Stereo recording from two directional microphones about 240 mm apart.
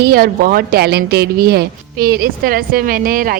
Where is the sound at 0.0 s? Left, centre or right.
Right.